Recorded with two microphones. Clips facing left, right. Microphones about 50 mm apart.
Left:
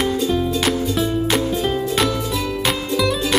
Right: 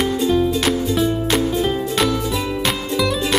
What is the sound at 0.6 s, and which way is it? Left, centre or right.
Music, centre.